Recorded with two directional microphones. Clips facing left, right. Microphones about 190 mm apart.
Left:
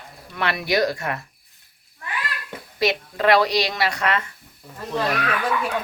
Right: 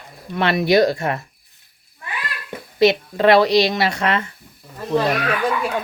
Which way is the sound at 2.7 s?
25° right (ahead or behind).